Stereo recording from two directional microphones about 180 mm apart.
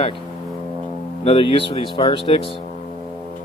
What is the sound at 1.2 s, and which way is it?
Speech, 30° left (ahead or behind).